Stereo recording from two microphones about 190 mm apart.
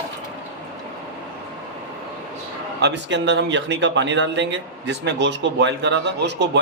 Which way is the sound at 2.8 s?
70° right (ahead or behind).